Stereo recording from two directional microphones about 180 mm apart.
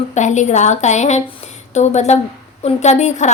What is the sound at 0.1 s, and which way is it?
Speech, 40° left (ahead or behind).